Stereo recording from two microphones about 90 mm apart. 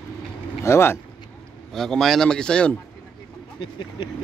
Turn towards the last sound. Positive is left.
turn(degrees=70)  # may be behind; listen again after turning